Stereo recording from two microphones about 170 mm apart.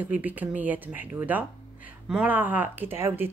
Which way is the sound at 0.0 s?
10° right (ahead or behind).